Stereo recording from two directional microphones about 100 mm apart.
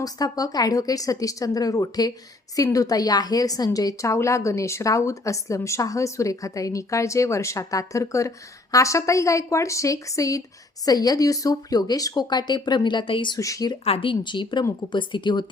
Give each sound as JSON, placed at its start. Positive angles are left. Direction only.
{"t": 0.0, "sound": "a woman's voice", "side_deg": 40}
{"t": 13.3, "sound": "a woman's voice", "side_deg": 35}
{"t": 13.8, "sound": "a woman's voice", "side_deg": 70}